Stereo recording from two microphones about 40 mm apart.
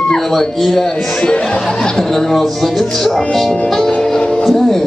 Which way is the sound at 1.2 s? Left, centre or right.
Left.